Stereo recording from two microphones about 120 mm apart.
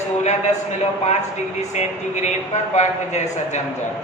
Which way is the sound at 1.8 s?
70° left (ahead or behind).